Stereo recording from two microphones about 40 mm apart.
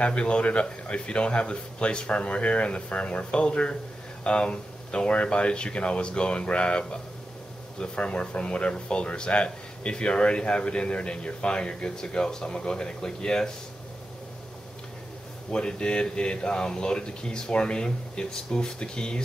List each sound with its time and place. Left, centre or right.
0.0 s speech: left
15.5 s speech: left